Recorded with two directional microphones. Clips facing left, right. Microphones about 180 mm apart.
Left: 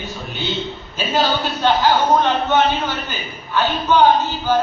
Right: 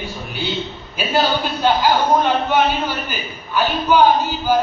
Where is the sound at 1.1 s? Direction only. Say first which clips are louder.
Right 1 dB; 10° right (ahead or behind).